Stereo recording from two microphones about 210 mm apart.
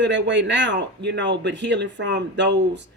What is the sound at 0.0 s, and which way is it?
Speech, 60° right (ahead or behind).